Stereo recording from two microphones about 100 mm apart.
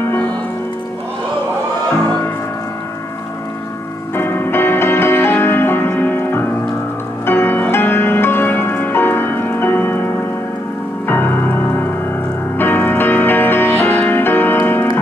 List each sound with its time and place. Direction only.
0.0 s music: 20° left (ahead or behind)
4.1 s music: 20° left (ahead or behind)